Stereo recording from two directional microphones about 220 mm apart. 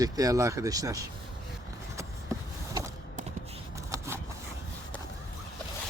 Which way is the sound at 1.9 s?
15° right (ahead or behind).